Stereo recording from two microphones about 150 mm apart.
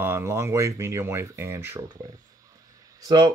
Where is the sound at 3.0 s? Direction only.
25° right (ahead or behind).